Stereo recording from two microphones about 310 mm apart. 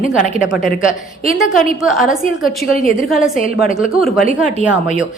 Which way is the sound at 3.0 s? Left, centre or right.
Centre.